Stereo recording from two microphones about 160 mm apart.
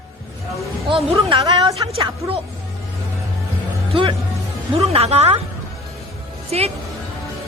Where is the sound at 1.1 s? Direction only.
30° right (ahead or behind).